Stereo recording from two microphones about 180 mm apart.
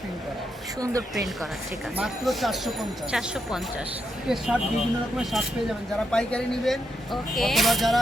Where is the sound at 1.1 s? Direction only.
Centre (ahead or behind).